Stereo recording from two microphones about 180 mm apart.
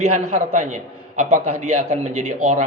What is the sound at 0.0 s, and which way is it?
A man's voice, 45° right (ahead or behind).